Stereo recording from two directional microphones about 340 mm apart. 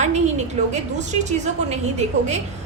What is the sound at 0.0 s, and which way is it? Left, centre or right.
A woman's voice, centre.